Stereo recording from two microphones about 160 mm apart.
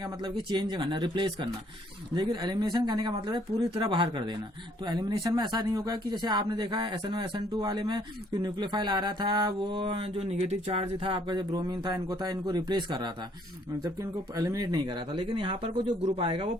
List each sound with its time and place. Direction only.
0.0 s speech: 25° right (ahead or behind)